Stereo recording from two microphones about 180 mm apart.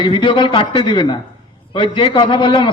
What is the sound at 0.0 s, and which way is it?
A man's voice, 30° left (ahead or behind).